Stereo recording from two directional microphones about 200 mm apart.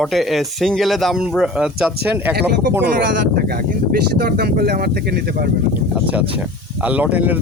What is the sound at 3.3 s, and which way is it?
Speech, 50° right (ahead or behind).